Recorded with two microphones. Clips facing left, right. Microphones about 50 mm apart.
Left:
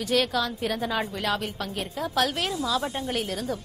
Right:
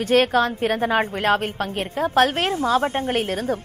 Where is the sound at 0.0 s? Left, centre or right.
Right.